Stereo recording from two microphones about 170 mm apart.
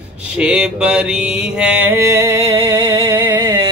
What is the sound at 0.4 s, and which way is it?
Mantra, 5° right (ahead or behind).